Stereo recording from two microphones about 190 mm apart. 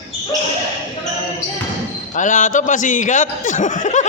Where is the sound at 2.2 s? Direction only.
40° left (ahead or behind).